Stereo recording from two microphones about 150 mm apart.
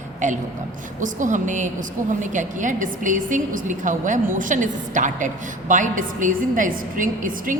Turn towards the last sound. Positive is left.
turn(degrees=-60)  # may be behind; listen again after turning